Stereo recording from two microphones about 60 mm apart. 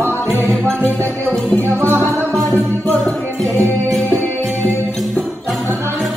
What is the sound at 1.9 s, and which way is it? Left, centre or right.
Music, right.